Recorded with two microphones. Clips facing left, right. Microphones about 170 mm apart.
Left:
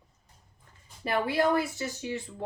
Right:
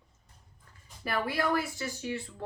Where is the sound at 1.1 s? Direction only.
25° left (ahead or behind).